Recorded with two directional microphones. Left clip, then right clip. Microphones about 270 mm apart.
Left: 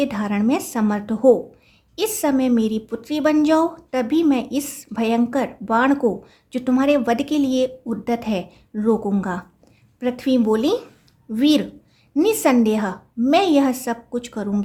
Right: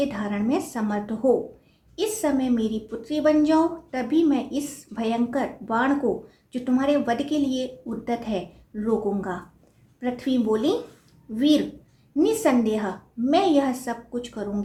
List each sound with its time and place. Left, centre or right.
0.0 s a woman's voice: left